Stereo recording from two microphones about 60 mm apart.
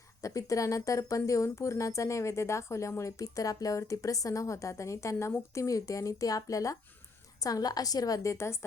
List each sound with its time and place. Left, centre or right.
0.2 s speech: left
5.5 s speech: left
7.4 s a woman's voice: left